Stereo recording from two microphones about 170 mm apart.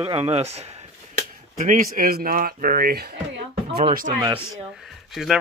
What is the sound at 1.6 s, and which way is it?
Speech, 55° right (ahead or behind).